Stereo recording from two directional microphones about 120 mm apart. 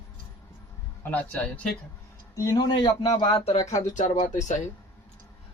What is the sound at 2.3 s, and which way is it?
Speech, 30° left (ahead or behind).